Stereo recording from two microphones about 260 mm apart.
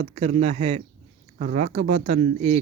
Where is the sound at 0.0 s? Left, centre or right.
Right.